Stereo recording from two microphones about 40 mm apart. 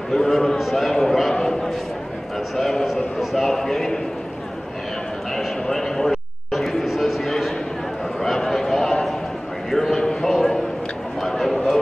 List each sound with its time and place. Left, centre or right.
0.1 s a man's voice: centre
3.4 s a man's voice: centre
5.3 s a sound: centre